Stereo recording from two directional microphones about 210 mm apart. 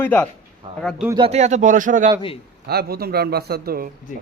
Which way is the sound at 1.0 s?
25° right (ahead or behind).